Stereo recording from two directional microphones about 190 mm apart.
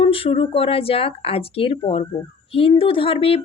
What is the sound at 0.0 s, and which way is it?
Speech, 30° left (ahead or behind).